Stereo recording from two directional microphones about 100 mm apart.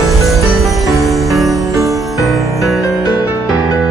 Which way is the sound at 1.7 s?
30° right (ahead or behind).